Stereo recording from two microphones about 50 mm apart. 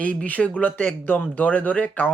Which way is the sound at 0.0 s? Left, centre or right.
Left.